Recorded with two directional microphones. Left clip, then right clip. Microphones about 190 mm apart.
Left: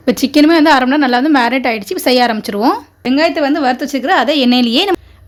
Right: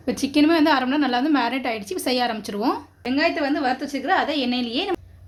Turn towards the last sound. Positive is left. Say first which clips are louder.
# left 12 dB
turn(degrees=55)  # may be behind; listen again after turning